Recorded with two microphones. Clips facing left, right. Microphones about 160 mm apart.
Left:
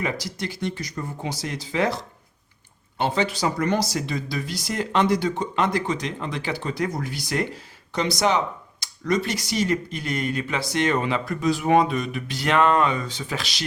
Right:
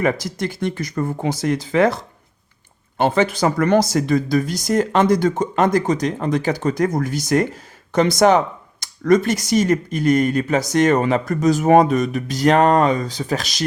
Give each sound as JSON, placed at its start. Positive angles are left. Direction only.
{"t": 0.0, "sound": "speech", "side_deg": -50}
{"t": 3.0, "sound": "speech", "side_deg": -50}